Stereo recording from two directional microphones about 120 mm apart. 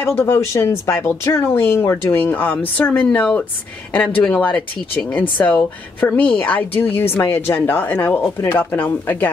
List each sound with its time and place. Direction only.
0.0 s a woman's voice: 20° left (ahead or behind)